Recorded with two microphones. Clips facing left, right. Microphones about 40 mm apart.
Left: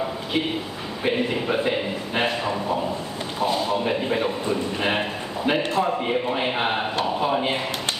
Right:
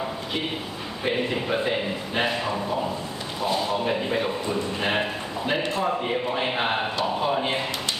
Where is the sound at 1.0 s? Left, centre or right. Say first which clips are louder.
Left 2 dB; centre.